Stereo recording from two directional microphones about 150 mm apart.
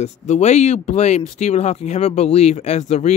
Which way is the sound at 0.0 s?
50° left (ahead or behind).